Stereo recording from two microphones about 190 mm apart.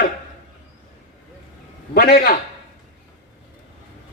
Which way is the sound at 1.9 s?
50° left (ahead or behind).